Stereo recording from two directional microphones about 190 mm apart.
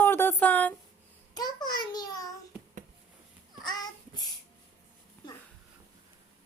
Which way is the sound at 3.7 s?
20° left (ahead or behind).